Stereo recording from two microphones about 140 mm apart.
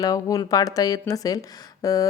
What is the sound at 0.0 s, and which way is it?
A woman's voice, 25° left (ahead or behind).